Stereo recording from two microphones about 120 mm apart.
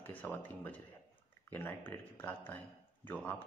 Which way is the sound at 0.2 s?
15° left (ahead or behind).